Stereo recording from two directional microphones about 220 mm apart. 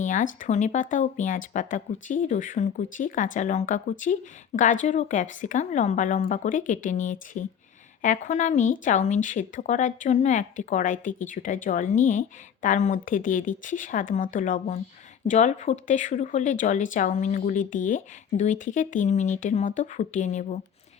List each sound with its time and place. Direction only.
0.0 s speech: 35° left (ahead or behind)